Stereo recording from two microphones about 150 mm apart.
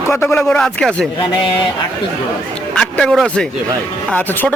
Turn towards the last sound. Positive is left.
turn(degrees=10)  # may be behind; listen again after turning